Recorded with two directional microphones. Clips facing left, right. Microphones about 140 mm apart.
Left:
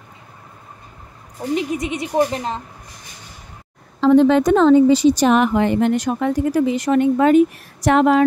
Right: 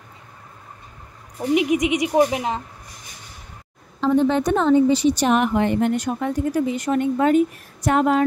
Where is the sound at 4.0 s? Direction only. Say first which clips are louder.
Left 6 dB; 90° left.